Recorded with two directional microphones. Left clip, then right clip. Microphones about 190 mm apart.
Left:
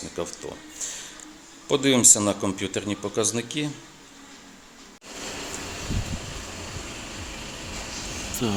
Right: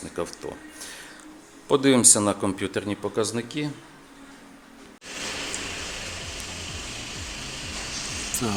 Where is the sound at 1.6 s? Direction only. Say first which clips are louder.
Even; centre (ahead or behind).